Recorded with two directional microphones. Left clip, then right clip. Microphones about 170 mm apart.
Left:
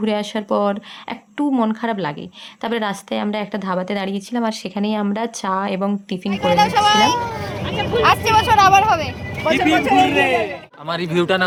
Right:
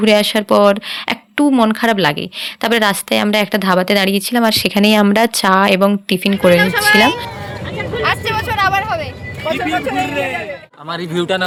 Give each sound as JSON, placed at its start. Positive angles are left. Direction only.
{"t": 0.0, "sound": "a woman's voice", "side_deg": -20}
{"t": 8.0, "sound": "vehicle", "side_deg": 0}
{"t": 9.5, "sound": "a man's voice", "side_deg": 5}